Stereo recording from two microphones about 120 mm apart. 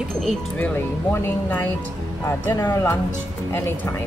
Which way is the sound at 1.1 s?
20° left (ahead or behind).